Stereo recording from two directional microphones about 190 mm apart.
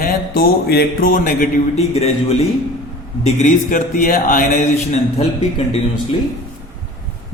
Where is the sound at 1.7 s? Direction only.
35° left (ahead or behind).